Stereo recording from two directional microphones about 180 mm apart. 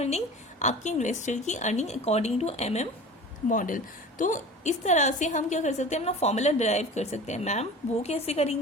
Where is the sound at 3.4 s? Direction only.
45° left (ahead or behind).